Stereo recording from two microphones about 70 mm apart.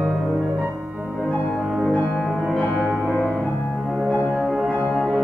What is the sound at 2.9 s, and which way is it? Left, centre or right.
Music, left.